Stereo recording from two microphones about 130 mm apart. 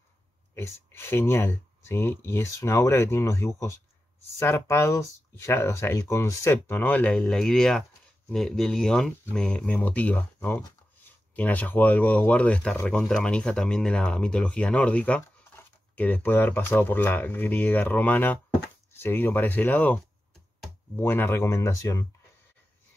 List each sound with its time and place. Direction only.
0.6 s speech: 20° left (ahead or behind)